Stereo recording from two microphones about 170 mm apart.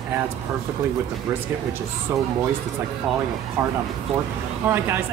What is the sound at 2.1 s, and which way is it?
Speech, 15° right (ahead or behind).